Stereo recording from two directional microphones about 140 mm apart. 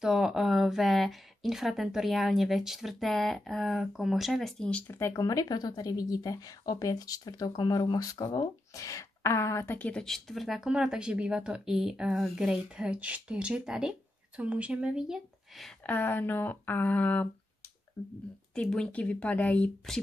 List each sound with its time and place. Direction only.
0.0 s speech: 5° right (ahead or behind)
15.8 s speech: 15° left (ahead or behind)
18.0 s speech: 25° left (ahead or behind)
18.5 s speech: 5° left (ahead or behind)